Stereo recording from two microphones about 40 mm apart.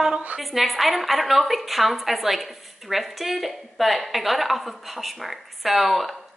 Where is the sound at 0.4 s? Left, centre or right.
Centre.